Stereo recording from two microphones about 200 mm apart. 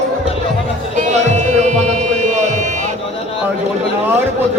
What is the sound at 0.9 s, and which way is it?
Music, 35° right (ahead or behind).